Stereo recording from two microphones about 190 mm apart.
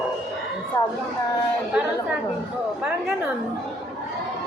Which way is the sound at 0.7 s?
20° left (ahead or behind).